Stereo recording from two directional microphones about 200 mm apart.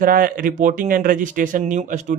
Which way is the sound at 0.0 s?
45° right (ahead or behind).